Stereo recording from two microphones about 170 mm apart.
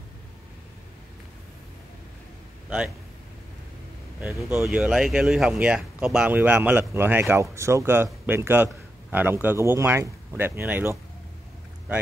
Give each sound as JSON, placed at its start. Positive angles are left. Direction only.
{"t": 4.4, "sound": "speech", "side_deg": -15}
{"t": 4.6, "sound": "speech", "side_deg": -5}